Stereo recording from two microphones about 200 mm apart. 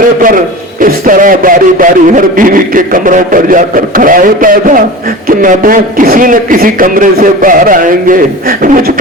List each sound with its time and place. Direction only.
0.8 s a man's voice: 45° right (ahead or behind)